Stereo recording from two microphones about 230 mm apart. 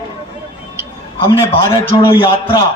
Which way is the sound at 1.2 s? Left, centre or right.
Centre.